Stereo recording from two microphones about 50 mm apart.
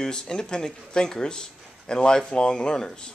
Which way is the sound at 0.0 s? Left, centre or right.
Centre.